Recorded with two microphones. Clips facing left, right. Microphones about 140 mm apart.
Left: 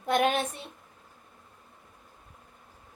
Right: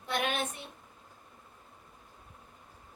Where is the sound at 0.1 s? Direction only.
45° left (ahead or behind).